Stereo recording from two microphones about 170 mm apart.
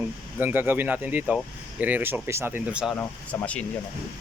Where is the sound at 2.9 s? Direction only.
15° left (ahead or behind).